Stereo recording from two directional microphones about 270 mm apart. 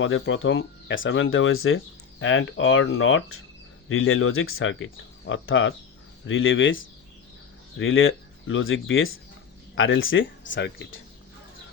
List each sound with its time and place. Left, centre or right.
0.0 s speech: left